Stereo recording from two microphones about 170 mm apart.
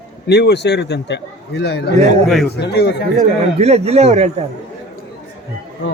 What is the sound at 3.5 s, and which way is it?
Speech, 40° right (ahead or behind).